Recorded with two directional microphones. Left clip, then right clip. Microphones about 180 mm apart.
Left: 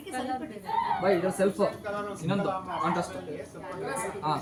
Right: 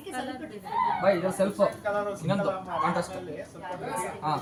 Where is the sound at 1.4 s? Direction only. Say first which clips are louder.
Right 2 dB; 25° right (ahead or behind).